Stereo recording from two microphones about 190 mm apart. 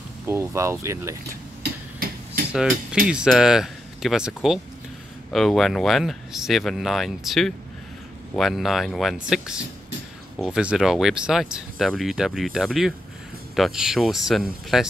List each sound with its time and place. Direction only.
0.3 s speech: 15° right (ahead or behind)
1.6 s a sound: 50° right (ahead or behind)
2.5 s speech: 5° right (ahead or behind)